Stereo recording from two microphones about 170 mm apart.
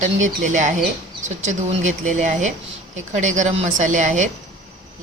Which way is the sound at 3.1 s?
45° right (ahead or behind).